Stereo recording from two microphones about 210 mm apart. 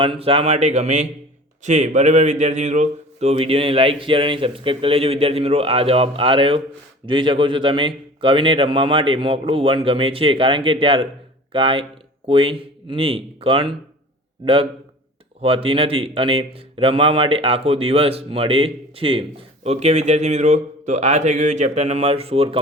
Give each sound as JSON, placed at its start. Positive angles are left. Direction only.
{"t": 0.0, "sound": "a man's voice", "side_deg": -25}